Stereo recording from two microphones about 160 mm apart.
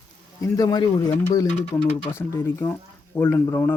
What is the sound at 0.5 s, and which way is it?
Speech, 25° left (ahead or behind).